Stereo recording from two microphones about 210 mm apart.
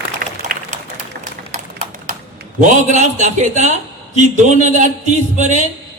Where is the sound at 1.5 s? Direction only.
35° right (ahead or behind).